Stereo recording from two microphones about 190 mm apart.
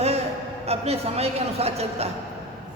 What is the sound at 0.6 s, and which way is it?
A man's voice, 35° right (ahead or behind).